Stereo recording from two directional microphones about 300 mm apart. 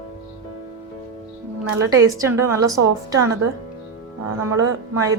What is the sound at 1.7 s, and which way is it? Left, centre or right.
A woman's voice, centre.